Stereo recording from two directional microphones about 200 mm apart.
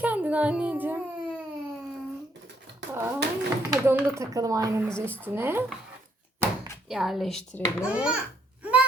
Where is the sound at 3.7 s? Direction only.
10° right (ahead or behind).